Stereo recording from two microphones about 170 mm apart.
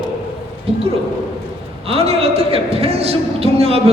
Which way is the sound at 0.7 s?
35° right (ahead or behind).